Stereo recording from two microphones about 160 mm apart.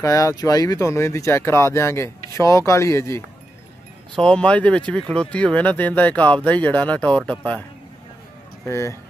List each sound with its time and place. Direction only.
0.0 s speech: 20° left (ahead or behind)
4.2 s speech: 5° left (ahead or behind)
8.6 s speech: 20° left (ahead or behind)